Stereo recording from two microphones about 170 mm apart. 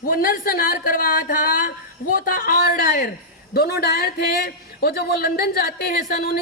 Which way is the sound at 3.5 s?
65° left (ahead or behind).